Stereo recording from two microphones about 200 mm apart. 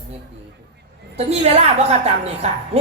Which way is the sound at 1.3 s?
30° right (ahead or behind).